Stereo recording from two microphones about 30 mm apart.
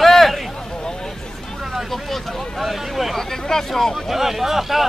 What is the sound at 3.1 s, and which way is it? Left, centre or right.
Speech, centre.